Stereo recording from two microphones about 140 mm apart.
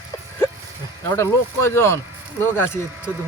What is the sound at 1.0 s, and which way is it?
Speech, 20° left (ahead or behind).